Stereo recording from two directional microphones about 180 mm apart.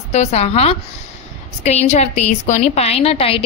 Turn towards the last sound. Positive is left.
turn(degrees=35)  # may be behind; listen again after turning